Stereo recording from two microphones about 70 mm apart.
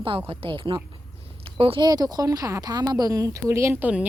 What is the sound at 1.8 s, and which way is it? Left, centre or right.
Speech, right.